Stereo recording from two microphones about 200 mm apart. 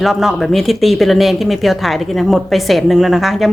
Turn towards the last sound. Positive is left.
turn(degrees=0)  # may be behind; listen again after turning